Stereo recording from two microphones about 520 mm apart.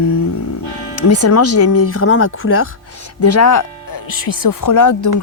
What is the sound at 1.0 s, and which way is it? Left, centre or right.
Speech, left.